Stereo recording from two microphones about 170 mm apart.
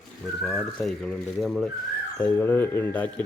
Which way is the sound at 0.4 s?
Centre (ahead or behind).